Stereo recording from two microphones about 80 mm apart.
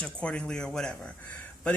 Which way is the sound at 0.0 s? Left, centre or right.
Centre.